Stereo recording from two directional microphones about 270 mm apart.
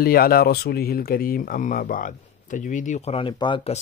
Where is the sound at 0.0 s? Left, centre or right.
Left.